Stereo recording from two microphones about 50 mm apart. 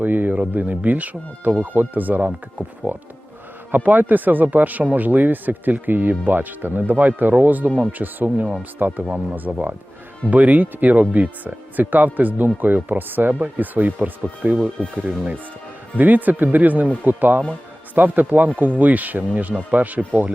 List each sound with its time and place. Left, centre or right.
0.0 s speech: right
16.0 s speech: right